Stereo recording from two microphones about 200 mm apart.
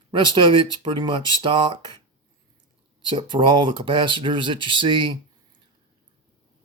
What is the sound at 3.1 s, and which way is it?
Speech, 25° right (ahead or behind).